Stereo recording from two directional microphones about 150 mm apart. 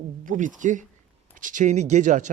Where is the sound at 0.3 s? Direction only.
60° right (ahead or behind).